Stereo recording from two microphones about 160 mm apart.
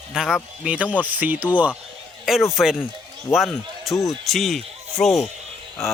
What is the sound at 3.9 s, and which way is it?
Speech, 20° left (ahead or behind).